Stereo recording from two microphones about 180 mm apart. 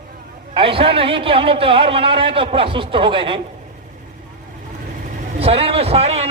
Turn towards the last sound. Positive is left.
turn(degrees=-35)  # may be behind; listen again after turning